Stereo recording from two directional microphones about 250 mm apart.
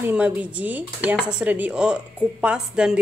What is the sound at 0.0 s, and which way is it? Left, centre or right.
Speech, centre.